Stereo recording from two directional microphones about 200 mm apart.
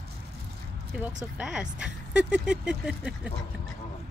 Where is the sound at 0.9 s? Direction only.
5° right (ahead or behind).